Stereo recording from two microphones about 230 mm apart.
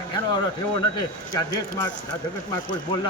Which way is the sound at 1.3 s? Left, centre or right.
Centre.